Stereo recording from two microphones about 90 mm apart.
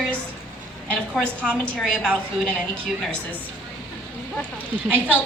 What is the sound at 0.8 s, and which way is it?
A woman's voice, 10° left (ahead or behind).